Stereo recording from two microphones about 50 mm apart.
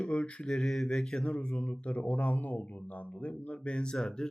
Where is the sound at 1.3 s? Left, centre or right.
Left.